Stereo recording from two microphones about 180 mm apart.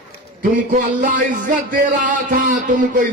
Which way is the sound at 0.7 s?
45° right (ahead or behind).